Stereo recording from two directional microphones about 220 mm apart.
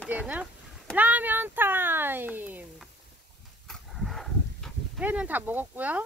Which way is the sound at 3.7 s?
Centre (ahead or behind).